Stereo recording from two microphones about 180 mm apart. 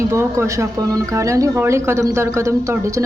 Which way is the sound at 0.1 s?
15° right (ahead or behind).